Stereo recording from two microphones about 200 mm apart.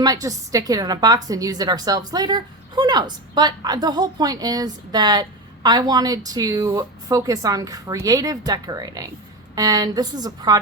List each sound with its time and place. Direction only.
0.0 s a woman's voice: 20° right (ahead or behind)